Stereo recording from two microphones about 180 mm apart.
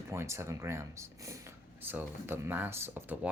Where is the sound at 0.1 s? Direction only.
15° right (ahead or behind).